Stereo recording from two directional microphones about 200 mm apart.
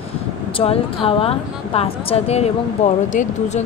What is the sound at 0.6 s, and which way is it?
A woman's voice, 25° left (ahead or behind).